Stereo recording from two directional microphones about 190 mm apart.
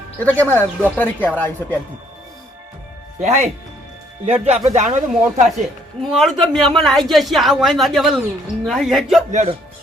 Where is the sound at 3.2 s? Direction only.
35° right (ahead or behind).